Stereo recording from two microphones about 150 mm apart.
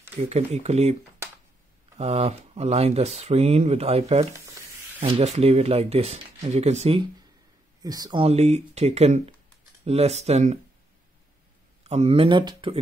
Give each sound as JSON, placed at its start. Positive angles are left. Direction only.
{"t": 0.2, "sound": "speech", "side_deg": -45}
{"t": 2.0, "sound": "speech", "side_deg": -45}
{"t": 5.0, "sound": "speech", "side_deg": -45}
{"t": 7.8, "sound": "speech", "side_deg": -25}
{"t": 8.2, "sound": "speech", "side_deg": -45}
{"t": 11.8, "sound": "speech", "side_deg": -45}